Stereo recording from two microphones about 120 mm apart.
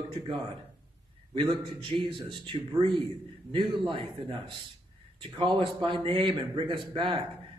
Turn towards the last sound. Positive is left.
turn(degrees=-45)  # may be behind; listen again after turning